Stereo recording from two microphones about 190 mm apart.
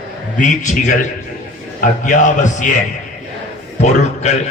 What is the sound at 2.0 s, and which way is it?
Speech, 40° left (ahead or behind).